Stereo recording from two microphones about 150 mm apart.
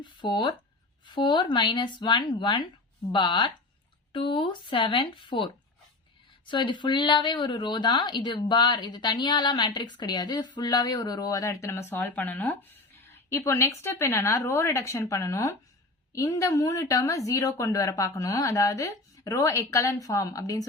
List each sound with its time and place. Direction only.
0.0 s speech: 30° left (ahead or behind)